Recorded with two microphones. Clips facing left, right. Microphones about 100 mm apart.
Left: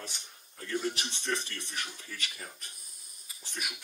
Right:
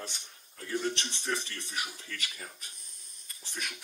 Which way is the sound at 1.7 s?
15° right (ahead or behind).